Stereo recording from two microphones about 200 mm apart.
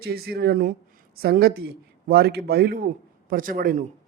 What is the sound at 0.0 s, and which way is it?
A man's voice, 50° right (ahead or behind).